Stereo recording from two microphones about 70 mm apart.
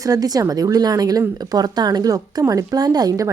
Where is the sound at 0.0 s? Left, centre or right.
Right.